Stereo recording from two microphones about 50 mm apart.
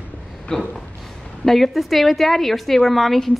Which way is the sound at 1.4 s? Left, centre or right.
Centre.